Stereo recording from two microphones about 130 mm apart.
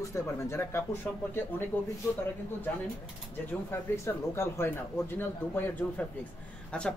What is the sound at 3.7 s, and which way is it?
A man's voice, 20° left (ahead or behind).